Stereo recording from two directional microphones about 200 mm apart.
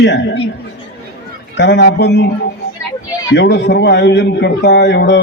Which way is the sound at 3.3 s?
60° left (ahead or behind).